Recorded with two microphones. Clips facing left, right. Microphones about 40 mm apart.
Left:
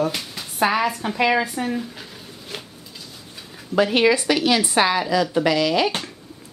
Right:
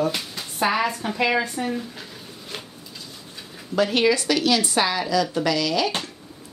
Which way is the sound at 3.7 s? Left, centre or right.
Centre.